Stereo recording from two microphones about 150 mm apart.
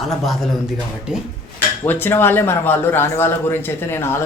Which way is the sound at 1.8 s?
15° left (ahead or behind).